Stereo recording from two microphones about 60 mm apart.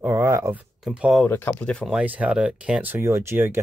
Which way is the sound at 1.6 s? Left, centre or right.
Centre.